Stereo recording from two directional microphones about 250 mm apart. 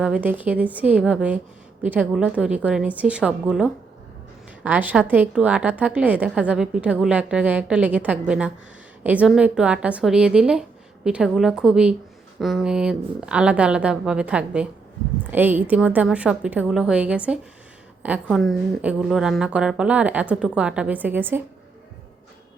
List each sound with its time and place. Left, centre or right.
0.0 s a woman's voice: centre